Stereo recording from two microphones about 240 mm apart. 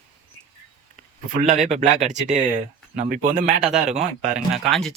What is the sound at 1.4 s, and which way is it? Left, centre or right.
Speech, right.